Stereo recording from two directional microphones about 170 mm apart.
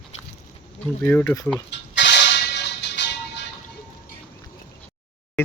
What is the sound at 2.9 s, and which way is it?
Music, 90° left.